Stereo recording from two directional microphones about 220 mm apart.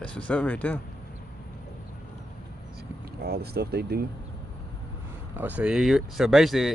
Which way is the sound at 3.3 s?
45° right (ahead or behind).